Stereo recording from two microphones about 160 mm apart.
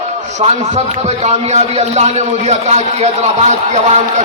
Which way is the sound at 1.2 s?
45° right (ahead or behind).